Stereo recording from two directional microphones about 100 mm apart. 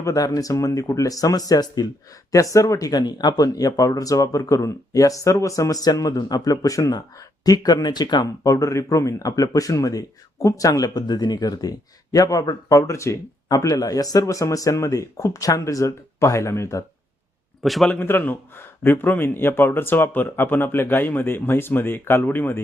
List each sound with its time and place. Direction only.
0.0 s speech: 35° left (ahead or behind)
17.6 s a man's voice: centre (ahead or behind)
18.0 s a man's voice: 20° left (ahead or behind)